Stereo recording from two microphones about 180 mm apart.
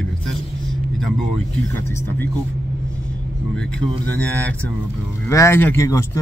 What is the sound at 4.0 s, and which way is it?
Speech, 10° left (ahead or behind).